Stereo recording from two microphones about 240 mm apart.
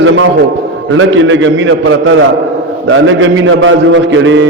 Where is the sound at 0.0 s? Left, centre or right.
Right.